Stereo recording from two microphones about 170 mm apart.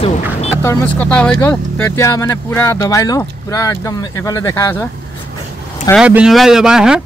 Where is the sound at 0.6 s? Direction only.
15° left (ahead or behind).